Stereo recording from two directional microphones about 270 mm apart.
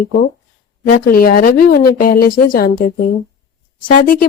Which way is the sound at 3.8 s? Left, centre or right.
Left.